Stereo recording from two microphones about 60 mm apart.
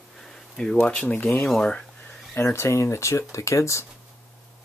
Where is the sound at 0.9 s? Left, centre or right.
Centre.